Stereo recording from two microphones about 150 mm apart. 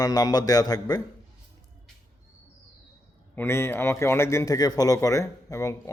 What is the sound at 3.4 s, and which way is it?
A man's voice, 15° left (ahead or behind).